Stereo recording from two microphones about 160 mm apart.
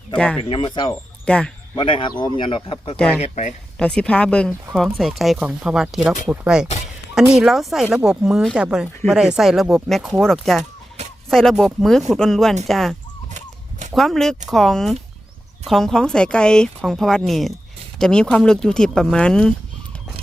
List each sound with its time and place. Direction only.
0.4 s speech: 35° left (ahead or behind)
1.2 s speech: 5° left (ahead or behind)
1.7 s speech: 30° left (ahead or behind)
3.2 s speech: 45° left (ahead or behind)
3.8 s speech: 5° left (ahead or behind)
13.3 s honk: 50° right (ahead or behind)
13.9 s speech: centre (ahead or behind)